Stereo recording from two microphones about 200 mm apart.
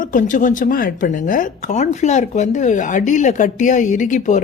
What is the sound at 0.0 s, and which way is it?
Speech, 40° left (ahead or behind).